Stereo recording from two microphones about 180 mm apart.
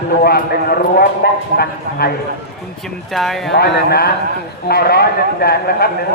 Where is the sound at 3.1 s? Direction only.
Centre (ahead or behind).